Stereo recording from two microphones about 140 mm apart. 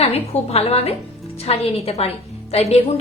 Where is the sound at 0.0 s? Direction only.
45° left (ahead or behind).